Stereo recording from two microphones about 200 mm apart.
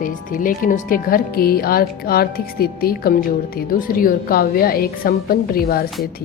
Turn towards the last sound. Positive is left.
turn(degrees=50)  # may be behind; listen again after turning